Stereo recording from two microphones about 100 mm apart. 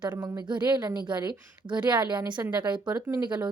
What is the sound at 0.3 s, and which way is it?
Speech, 50° right (ahead or behind).